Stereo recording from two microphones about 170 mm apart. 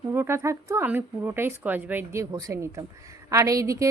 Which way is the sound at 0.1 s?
15° right (ahead or behind).